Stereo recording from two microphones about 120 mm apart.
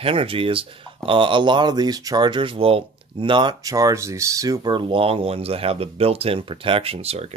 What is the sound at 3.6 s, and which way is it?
Speech, 30° right (ahead or behind).